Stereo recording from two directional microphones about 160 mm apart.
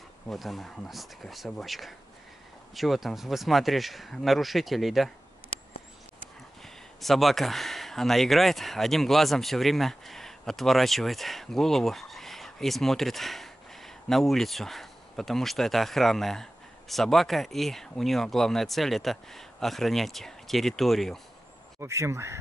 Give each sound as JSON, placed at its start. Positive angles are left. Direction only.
{"t": 0.3, "sound": "speech", "side_deg": 0}
{"t": 6.1, "sound": "speech", "side_deg": 0}
{"t": 21.7, "sound": "speech", "side_deg": -20}